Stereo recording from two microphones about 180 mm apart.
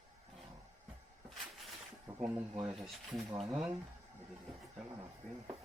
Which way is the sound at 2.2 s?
10° right (ahead or behind).